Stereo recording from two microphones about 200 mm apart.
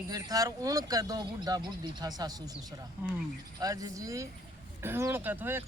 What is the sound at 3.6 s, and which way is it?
Speech, 15° right (ahead or behind).